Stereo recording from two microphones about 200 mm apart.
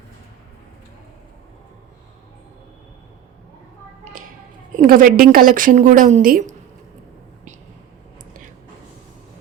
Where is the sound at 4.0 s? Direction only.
40° right (ahead or behind).